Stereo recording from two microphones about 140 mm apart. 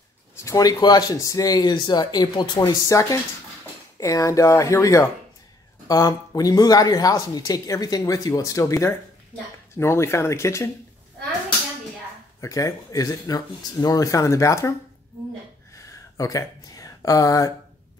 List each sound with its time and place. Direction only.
0.4 s speech: 25° left (ahead or behind)
2.6 s speech: 25° left (ahead or behind)
12.4 s speech: 20° left (ahead or behind)
15.7 s a sound: 25° left (ahead or behind)